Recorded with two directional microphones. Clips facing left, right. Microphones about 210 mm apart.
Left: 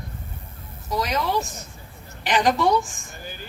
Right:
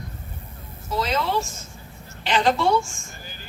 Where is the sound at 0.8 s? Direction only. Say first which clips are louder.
Even; 15° left (ahead or behind).